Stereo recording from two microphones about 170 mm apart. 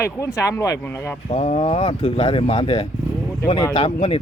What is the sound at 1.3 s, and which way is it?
Speech, 40° left (ahead or behind).